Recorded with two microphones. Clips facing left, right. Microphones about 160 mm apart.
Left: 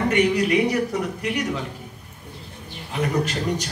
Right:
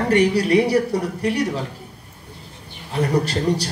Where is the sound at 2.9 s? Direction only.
35° right (ahead or behind).